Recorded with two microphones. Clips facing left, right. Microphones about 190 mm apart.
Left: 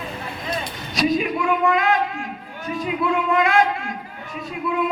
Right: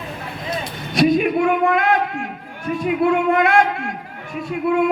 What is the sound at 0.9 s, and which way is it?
A child's voice, 55° right (ahead or behind).